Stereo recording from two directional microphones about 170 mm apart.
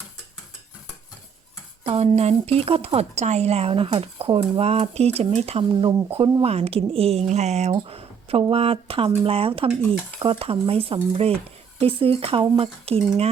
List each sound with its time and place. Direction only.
1.8 s speech: 35° right (ahead or behind)